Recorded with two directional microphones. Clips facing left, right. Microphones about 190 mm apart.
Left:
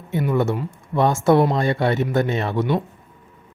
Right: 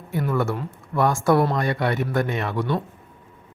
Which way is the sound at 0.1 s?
20° left (ahead or behind).